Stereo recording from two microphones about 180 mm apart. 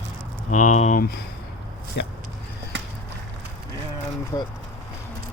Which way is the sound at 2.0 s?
70° left (ahead or behind).